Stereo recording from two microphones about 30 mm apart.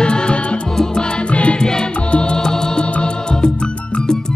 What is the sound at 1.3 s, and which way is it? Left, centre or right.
Music, left.